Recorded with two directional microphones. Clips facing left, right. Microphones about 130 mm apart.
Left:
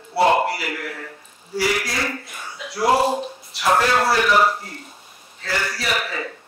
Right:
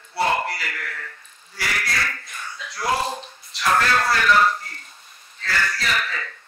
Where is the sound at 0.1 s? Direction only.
25° left (ahead or behind).